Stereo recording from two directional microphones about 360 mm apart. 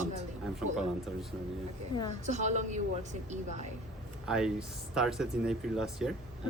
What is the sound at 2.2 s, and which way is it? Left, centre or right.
A woman's voice, centre.